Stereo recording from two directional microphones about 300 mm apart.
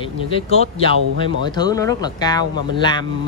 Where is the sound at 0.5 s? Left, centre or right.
Centre.